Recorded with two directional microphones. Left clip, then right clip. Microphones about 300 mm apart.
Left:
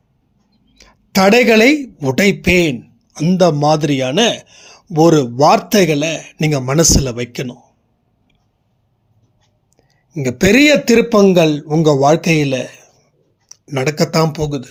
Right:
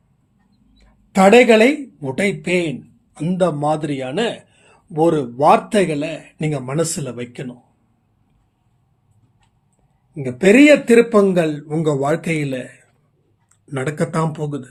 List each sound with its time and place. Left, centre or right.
0.8 s speech: left
10.2 s a man's voice: left; by 14.7 s centre